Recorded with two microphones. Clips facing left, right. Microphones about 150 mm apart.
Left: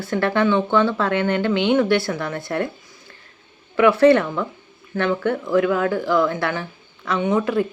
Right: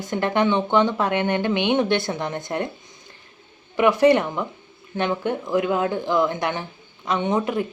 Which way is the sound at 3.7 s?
15° right (ahead or behind).